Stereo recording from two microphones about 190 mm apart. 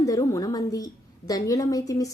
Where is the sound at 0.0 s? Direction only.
15° left (ahead or behind).